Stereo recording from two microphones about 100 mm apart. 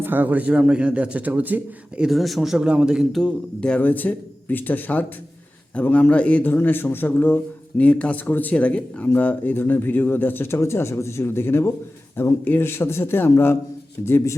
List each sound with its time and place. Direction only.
0.0 s a man's voice: 20° right (ahead or behind)
2.0 s speech: centre (ahead or behind)
3.1 s speech: 5° left (ahead or behind); by 14.3 s 25° left (ahead or behind)